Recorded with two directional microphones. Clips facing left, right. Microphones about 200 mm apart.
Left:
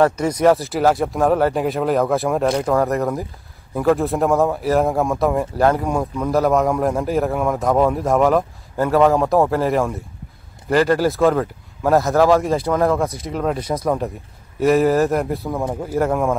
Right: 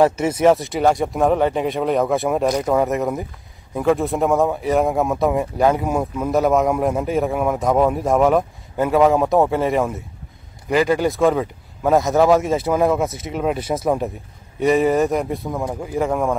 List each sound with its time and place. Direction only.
0.1 s speech: 25° right (ahead or behind)
0.4 s a man's voice: centre (ahead or behind)
13.6 s speech: 25° right (ahead or behind)
13.8 s a man's voice: 5° right (ahead or behind)